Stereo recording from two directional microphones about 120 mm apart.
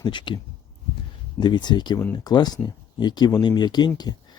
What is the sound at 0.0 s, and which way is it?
Speech, 40° left (ahead or behind).